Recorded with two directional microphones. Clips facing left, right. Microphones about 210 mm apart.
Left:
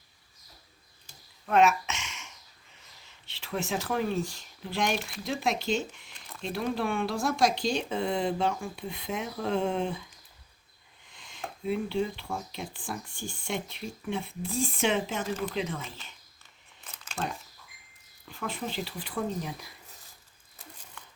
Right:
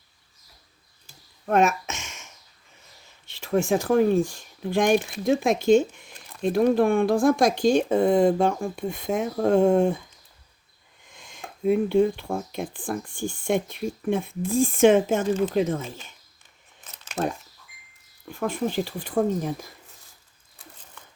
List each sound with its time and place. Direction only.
1.5 s a sound: 45° right (ahead or behind)
3.2 s speech: 45° right (ahead or behind)
11.1 s speech: 50° right (ahead or behind)
17.2 s speech: 40° right (ahead or behind)